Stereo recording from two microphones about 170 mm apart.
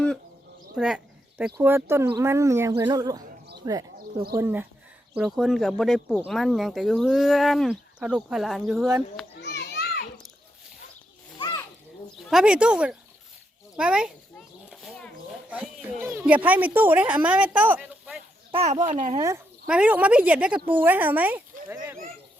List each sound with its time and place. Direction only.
0.8 s a sound: 5° right (ahead or behind)
1.6 s speech: 15° right (ahead or behind)
4.4 s speech: 10° right (ahead or behind)
5.1 s speech: centre (ahead or behind)
9.4 s children playing: 75° left (ahead or behind)
11.3 s children playing: 25° left (ahead or behind)
12.1 s speech: centre (ahead or behind)
14.7 s a sound: centre (ahead or behind)
18.5 s a child's voice: 40° right (ahead or behind)
19.1 s speech: 20° right (ahead or behind)
19.6 s speech: 5° right (ahead or behind)